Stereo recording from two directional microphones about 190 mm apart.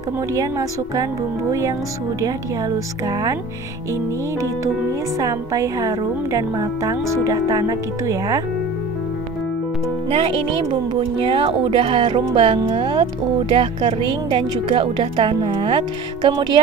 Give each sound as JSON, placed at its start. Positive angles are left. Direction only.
{"t": 0.3, "sound": "speech", "side_deg": -15}
{"t": 5.2, "sound": "speech", "side_deg": -15}
{"t": 10.0, "sound": "speech", "side_deg": -30}